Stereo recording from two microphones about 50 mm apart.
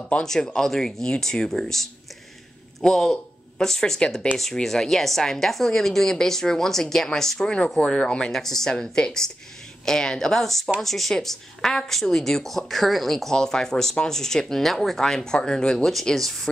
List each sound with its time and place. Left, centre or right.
0.2 s a woman's voice: centre